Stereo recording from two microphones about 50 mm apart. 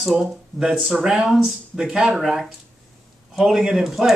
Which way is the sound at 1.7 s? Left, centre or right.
Centre.